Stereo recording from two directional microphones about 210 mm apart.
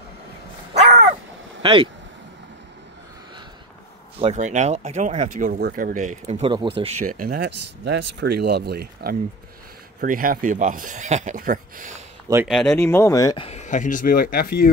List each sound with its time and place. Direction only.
1.6 s speech: 25° right (ahead or behind)
4.2 s speech: 35° right (ahead or behind)
12.4 s speech: centre (ahead or behind); by 13.5 s 15° left (ahead or behind)
13.5 s speech: 35° left (ahead or behind)